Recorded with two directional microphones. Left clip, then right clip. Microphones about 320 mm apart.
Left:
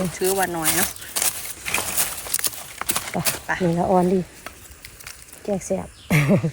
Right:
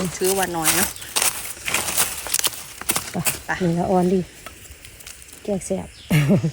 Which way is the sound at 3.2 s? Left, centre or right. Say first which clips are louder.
Even; centre.